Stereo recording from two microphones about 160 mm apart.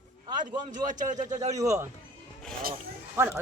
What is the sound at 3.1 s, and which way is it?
Speech, 15° right (ahead or behind).